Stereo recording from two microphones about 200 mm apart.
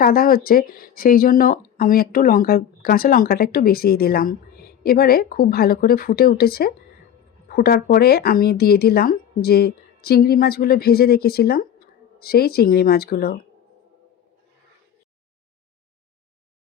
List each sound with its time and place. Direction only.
0.0 s speech: 50° left (ahead or behind)